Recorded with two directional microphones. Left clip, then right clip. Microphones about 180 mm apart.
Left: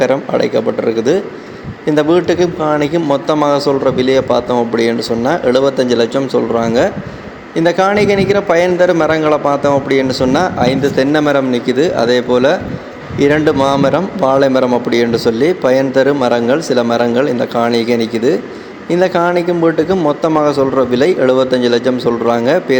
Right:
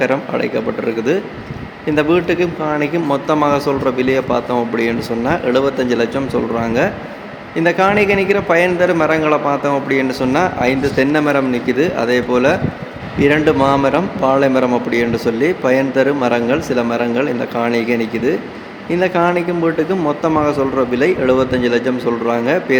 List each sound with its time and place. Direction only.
0.0 s a man's voice: 15° left (ahead or behind)